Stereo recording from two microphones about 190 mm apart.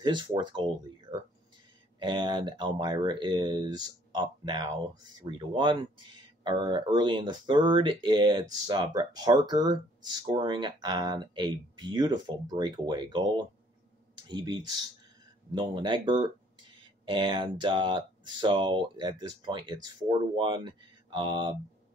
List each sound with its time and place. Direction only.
0.0 s speech: 25° right (ahead or behind)
2.0 s speech: 25° right (ahead or behind)